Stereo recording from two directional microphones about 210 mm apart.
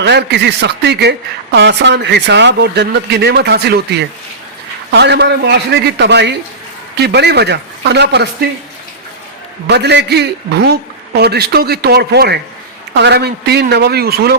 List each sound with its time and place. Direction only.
0.0 s speech: 55° right (ahead or behind)
9.6 s speech: 55° right (ahead or behind)